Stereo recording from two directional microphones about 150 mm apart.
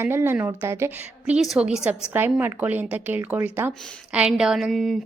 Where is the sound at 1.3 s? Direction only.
5° right (ahead or behind).